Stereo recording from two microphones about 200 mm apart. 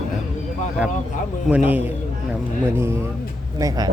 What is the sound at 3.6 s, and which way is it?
Speech, 20° right (ahead or behind).